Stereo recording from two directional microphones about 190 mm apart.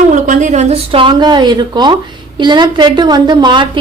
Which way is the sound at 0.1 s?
40° right (ahead or behind).